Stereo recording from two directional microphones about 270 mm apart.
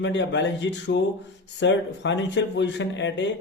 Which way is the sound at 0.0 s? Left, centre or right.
Left.